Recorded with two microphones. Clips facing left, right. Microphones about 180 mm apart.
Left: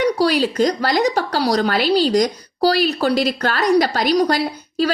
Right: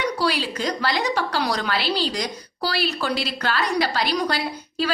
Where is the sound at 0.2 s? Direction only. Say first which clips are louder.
Left 8 dB; 40° left (ahead or behind).